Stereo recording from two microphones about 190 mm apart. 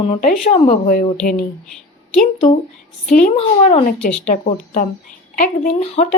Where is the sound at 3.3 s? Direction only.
30° left (ahead or behind).